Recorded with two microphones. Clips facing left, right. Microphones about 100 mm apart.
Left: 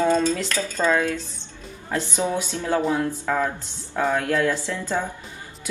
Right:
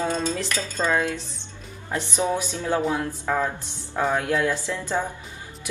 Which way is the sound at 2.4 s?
15° right (ahead or behind).